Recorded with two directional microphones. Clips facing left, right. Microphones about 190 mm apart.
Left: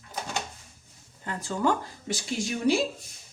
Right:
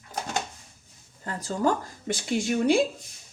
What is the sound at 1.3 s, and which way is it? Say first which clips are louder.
Speech: right 1 dB; 40° right (ahead or behind).